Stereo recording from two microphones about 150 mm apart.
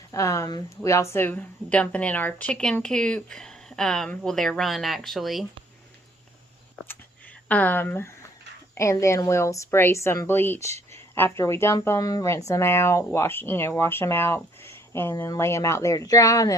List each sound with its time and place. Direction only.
0.1 s a woman's voice: 20° left (ahead or behind); by 5.5 s centre (ahead or behind)
7.4 s a woman's voice: 10° left (ahead or behind)